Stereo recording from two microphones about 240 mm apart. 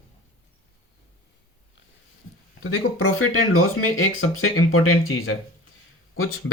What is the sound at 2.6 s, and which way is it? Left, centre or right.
Speech, left.